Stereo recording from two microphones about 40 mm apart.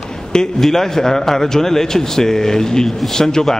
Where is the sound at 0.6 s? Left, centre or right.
Centre.